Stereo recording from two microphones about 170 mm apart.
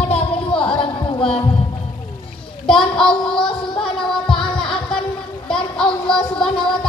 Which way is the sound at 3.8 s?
5° left (ahead or behind).